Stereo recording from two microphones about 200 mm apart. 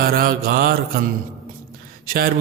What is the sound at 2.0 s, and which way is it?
Speech, 45° right (ahead or behind).